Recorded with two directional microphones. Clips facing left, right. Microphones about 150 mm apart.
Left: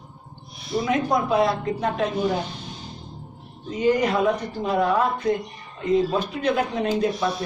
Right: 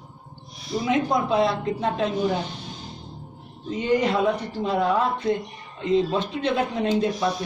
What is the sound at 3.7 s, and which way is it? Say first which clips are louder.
A man's voice: left 1 dB; 30° right (ahead or behind).